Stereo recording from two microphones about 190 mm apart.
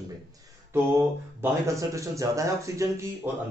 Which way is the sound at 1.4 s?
15° right (ahead or behind).